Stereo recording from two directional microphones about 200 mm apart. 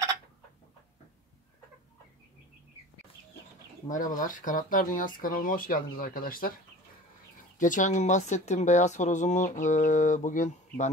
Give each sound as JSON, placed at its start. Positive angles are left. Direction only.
{"t": 3.9, "sound": "speech", "side_deg": 40}
{"t": 7.5, "sound": "speech", "side_deg": 40}